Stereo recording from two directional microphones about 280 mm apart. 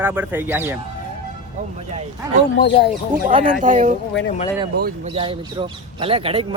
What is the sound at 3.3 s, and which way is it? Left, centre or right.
Speech, right.